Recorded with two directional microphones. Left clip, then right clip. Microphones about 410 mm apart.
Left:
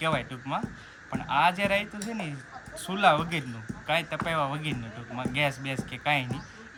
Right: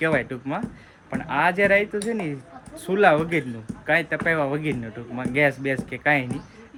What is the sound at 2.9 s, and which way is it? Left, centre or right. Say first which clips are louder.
Speech: right 5 dB; centre.